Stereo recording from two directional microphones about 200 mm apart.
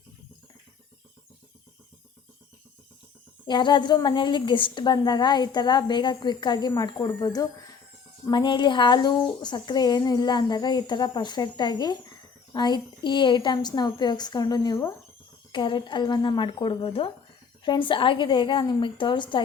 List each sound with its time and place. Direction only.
3.4 s a woman's voice: 20° left (ahead or behind)